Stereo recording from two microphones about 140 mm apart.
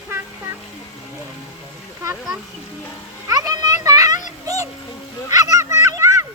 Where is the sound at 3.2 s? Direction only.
25° right (ahead or behind).